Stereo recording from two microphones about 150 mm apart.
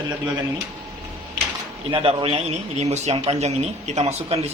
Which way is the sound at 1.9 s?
35° right (ahead or behind).